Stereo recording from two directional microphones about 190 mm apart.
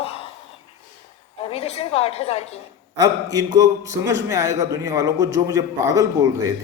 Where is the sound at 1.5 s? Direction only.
35° left (ahead or behind).